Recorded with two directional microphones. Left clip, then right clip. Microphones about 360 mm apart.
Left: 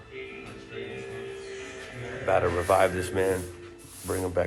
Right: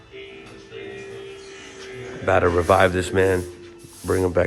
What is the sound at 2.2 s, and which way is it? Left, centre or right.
A man's voice, right.